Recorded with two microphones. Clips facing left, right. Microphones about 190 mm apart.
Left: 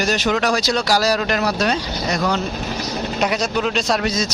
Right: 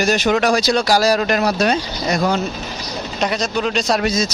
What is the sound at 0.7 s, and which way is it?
Speech, 50° right (ahead or behind).